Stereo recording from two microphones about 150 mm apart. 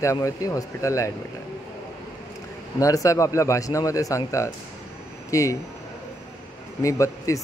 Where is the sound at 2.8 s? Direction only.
20° left (ahead or behind).